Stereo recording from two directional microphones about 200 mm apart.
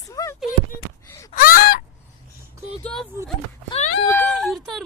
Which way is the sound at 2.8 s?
Centre (ahead or behind).